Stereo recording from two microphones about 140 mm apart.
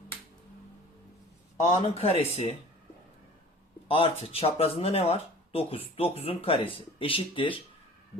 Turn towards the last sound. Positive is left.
turn(degrees=40)  # may be behind; listen again after turning